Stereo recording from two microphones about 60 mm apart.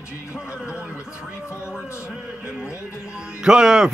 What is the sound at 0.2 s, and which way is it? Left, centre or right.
Music, centre.